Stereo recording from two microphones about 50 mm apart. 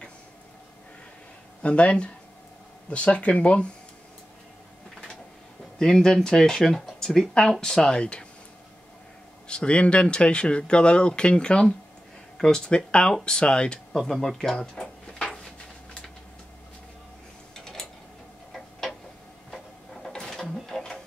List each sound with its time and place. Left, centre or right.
1.6 s speech: left
5.8 s speech: centre
9.5 s speech: left
13.9 s drawer open or close: centre
18.5 s tick-tock: centre
19.5 s printer: centre
20.6 s a sound: centre